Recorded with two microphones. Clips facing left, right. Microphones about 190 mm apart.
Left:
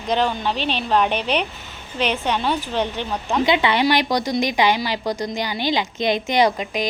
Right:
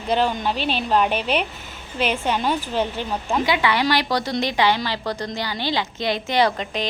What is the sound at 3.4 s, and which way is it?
A woman's voice, 20° left (ahead or behind).